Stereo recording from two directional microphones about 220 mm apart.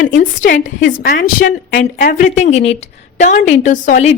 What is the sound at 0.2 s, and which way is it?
A woman's voice, 35° left (ahead or behind).